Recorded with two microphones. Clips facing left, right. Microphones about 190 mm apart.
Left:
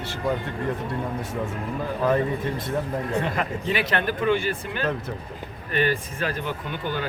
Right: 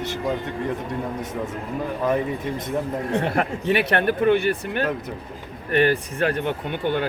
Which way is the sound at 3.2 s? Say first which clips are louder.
Right 4 dB; 65° right (ahead or behind).